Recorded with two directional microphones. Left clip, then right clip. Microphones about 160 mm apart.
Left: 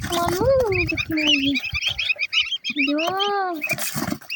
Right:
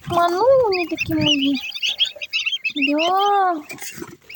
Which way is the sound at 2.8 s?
15° right (ahead or behind).